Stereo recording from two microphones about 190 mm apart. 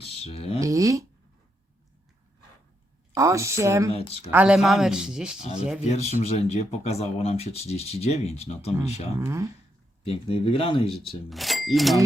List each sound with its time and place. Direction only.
0.0 s speech: 30° left (ahead or behind)
0.6 s a sound: 15° right (ahead or behind)
3.2 s speech: 15° right (ahead or behind)
3.9 s speech: 30° left (ahead or behind)
4.3 s speech: 5° right (ahead or behind)
5.8 s speech: 35° left (ahead or behind)
9.2 s speech: 15° right (ahead or behind)
10.0 s speech: 30° left (ahead or behind)
11.3 s speech: centre (ahead or behind)